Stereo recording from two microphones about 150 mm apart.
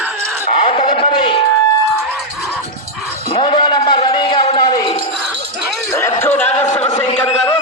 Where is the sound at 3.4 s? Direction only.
30° left (ahead or behind).